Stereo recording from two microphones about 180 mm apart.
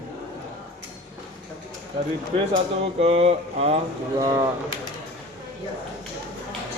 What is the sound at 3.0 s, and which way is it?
Speech, 35° right (ahead or behind).